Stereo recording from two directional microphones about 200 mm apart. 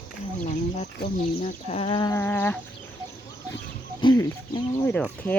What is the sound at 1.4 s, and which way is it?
Speech, 35° left (ahead or behind).